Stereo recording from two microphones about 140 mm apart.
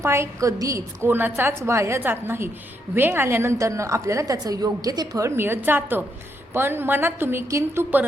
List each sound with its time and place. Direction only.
0.0 s a woman's voice: 20° right (ahead or behind)